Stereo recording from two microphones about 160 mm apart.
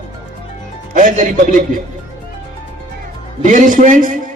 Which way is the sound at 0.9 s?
55° right (ahead or behind).